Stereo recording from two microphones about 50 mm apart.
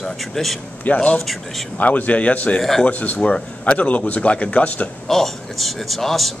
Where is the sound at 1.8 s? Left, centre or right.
Left.